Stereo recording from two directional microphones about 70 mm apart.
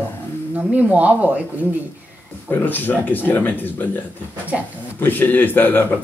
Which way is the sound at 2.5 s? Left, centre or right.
Left.